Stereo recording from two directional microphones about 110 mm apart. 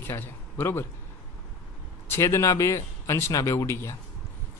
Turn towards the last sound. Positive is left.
turn(degrees=25)  # may be behind; listen again after turning